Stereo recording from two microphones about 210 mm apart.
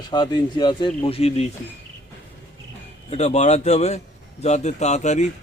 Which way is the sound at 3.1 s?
30° left (ahead or behind).